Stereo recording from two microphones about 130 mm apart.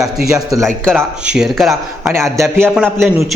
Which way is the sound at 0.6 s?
5° left (ahead or behind).